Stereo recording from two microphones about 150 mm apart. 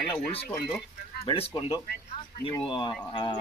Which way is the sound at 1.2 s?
35° left (ahead or behind).